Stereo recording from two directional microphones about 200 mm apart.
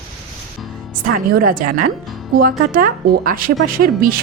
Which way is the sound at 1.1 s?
45° right (ahead or behind).